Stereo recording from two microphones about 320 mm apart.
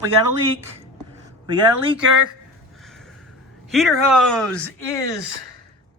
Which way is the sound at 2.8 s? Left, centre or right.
Centre.